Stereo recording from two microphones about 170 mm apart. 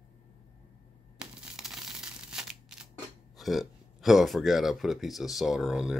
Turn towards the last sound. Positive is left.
turn(degrees=-5)  # may be behind; listen again after turning